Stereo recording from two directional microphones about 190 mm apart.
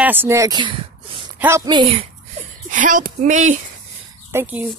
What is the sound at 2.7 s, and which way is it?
Speech, 45° right (ahead or behind).